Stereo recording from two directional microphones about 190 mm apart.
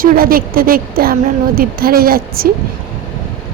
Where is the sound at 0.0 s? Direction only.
50° right (ahead or behind).